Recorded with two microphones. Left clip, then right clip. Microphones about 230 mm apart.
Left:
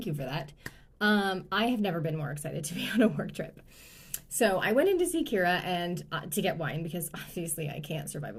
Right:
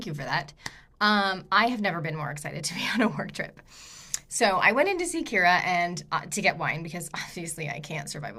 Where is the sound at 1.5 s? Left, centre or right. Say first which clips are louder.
Right 8 dB; right.